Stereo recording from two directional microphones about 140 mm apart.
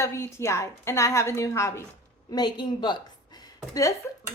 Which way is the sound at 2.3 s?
30° left (ahead or behind).